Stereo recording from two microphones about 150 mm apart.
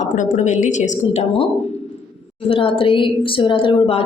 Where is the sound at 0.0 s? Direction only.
55° left (ahead or behind).